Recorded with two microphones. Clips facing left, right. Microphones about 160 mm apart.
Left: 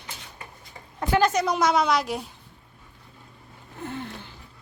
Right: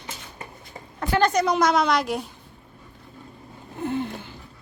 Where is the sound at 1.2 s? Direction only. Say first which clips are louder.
Right 4 dB; 5° left (ahead or behind).